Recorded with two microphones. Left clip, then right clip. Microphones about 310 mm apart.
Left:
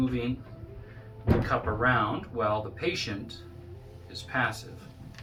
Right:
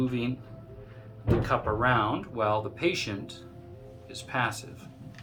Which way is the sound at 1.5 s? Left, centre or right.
Right.